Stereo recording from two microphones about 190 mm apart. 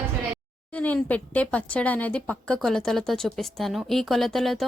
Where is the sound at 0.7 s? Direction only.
10° left (ahead or behind).